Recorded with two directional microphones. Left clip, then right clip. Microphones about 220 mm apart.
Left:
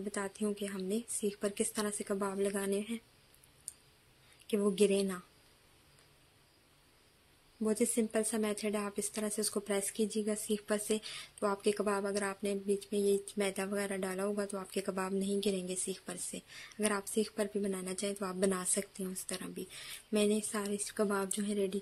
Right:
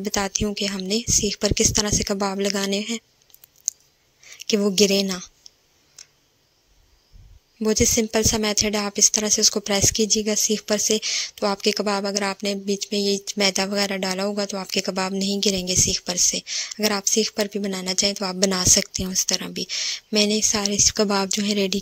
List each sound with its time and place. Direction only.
0.0 s speech: 40° right (ahead or behind)
4.5 s speech: 35° right (ahead or behind)
7.6 s speech: 35° right (ahead or behind)